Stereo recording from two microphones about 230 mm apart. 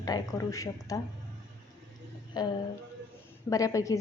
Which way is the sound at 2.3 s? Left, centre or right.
Centre.